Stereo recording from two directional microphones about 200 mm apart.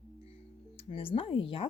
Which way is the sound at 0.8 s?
30° left (ahead or behind).